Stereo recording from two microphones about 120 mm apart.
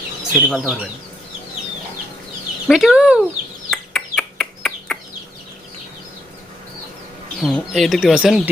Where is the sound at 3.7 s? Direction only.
5° left (ahead or behind).